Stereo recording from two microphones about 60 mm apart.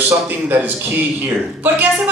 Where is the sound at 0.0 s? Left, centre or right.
Right.